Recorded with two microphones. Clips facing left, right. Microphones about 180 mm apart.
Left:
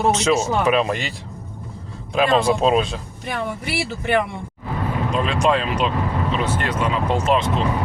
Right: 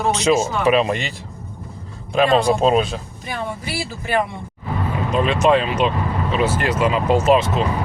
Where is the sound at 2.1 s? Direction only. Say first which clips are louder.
Right 2 dB; centre (ahead or behind).